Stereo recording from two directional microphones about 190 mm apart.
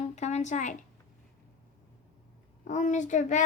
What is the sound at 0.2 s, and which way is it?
Speech, 35° left (ahead or behind).